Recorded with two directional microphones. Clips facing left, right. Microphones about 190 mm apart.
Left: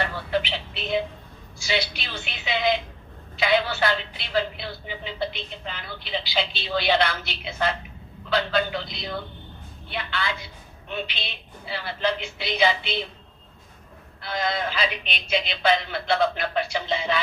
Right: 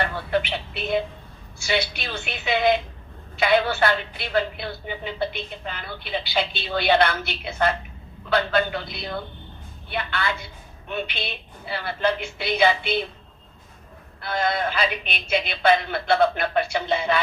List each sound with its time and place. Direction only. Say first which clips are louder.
0.3 s a sound: right 2 dB; 55° right (ahead or behind)
1.6 s a woman's voice: right 2 dB; 55° right (ahead or behind)
14.2 s a woman's voice: right 3 dB; 55° right (ahead or behind)